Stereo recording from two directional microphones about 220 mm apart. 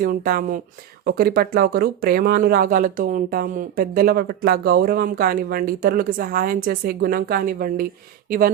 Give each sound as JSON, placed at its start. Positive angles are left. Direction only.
{"t": 0.0, "sound": "speech", "side_deg": -40}